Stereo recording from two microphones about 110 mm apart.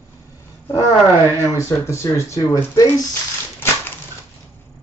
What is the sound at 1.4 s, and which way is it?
Speech, 25° left (ahead or behind).